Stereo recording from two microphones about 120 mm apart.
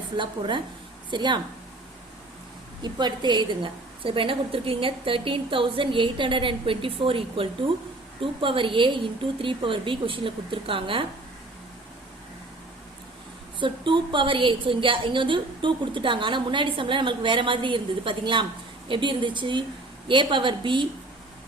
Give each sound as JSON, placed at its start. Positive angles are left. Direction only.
{"t": 0.2, "sound": "speech", "side_deg": -40}
{"t": 2.8, "sound": "a woman's voice", "side_deg": -40}
{"t": 13.6, "sound": "a woman's voice", "side_deg": -45}